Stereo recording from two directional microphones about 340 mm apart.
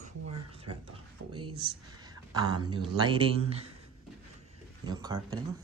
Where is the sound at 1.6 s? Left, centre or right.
Centre.